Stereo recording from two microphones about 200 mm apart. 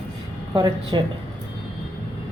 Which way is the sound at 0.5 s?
20° right (ahead or behind).